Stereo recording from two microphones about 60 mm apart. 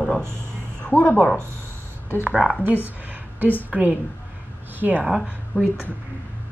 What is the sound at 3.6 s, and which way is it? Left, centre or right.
A woman's voice, right.